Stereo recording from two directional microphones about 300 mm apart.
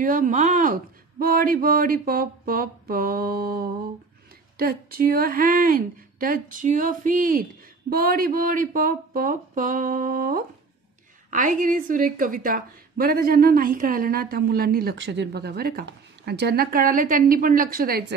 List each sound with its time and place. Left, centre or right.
0.0 s a woman's voice: right